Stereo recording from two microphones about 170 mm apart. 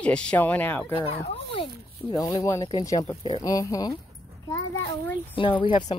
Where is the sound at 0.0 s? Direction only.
5° left (ahead or behind).